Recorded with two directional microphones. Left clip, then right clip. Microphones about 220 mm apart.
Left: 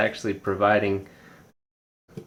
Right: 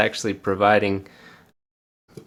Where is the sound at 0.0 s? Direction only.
40° right (ahead or behind).